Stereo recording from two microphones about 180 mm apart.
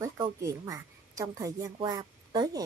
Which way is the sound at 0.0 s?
15° right (ahead or behind).